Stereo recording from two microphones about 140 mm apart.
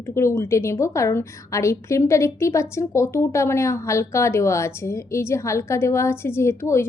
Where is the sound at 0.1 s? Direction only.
20° left (ahead or behind).